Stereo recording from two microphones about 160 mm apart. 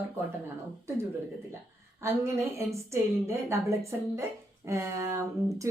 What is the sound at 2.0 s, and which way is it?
Speech, 15° right (ahead or behind).